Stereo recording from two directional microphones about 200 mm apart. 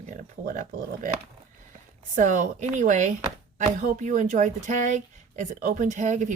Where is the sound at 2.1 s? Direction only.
40° right (ahead or behind).